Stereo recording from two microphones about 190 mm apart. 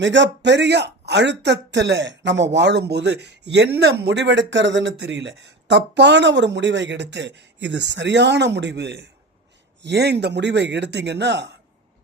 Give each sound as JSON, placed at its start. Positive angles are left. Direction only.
{"t": 0.0, "sound": "speech", "side_deg": -70}